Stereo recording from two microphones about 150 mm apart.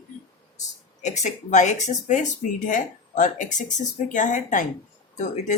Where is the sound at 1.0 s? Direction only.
50° left (ahead or behind).